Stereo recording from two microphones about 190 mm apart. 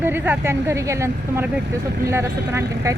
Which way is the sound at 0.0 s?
10° right (ahead or behind).